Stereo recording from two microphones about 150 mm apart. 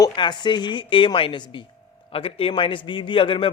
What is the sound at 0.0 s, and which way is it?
A man's voice, 30° left (ahead or behind).